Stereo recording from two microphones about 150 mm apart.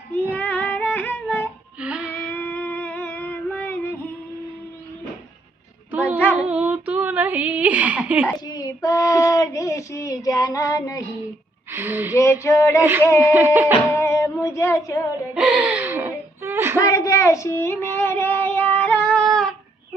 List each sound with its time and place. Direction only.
0.1 s child singing: 10° left (ahead or behind)
1.8 s female singing: 5° right (ahead or behind)
2.3 s music: 10° left (ahead or behind)
5.9 s child singing: 10° right (ahead or behind)
6.3 s female singing: 10° right (ahead or behind)
8.4 s child singing: 25° left (ahead or behind)
11.7 s speech: 15° right (ahead or behind)
12.1 s female singing: 20° left (ahead or behind)
12.8 s a sound: 15° right (ahead or behind)
13.9 s child singing: 20° left (ahead or behind)
15.4 s gasp: 5° right (ahead or behind)
16.7 s a sound: 20° left (ahead or behind); by 19.5 s 5° left (ahead or behind)